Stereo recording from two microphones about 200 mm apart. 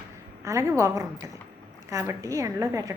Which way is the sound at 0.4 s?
15° right (ahead or behind).